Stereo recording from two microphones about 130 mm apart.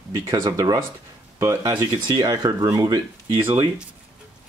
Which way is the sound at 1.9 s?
30° right (ahead or behind).